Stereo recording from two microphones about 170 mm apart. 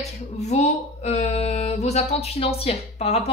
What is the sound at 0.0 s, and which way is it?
Speech, 40° left (ahead or behind).